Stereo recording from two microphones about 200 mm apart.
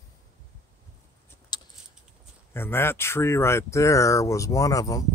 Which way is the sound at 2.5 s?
10° left (ahead or behind).